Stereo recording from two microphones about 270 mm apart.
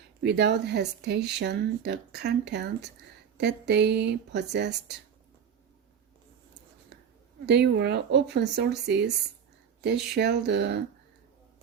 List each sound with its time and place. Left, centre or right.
0.2 s speech: right
7.4 s speech: right